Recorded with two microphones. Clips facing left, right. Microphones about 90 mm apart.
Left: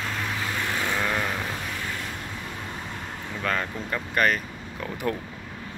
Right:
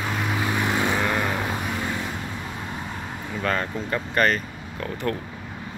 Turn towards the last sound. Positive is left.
turn(degrees=10)  # may be behind; listen again after turning